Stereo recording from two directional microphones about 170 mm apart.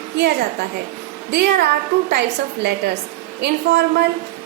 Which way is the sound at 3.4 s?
75° right (ahead or behind).